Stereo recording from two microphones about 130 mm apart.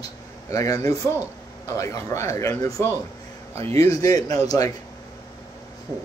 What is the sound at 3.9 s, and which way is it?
Speech, 25° left (ahead or behind).